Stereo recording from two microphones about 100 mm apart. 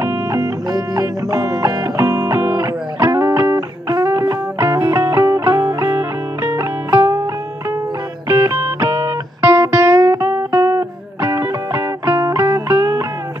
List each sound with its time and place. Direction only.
0.0 s music: 30° right (ahead or behind)
8.3 s music: 25° right (ahead or behind)